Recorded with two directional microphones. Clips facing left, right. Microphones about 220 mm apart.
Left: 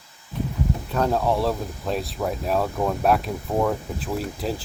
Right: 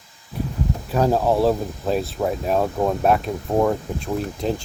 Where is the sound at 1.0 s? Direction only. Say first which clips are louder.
Right 3 dB; 30° right (ahead or behind).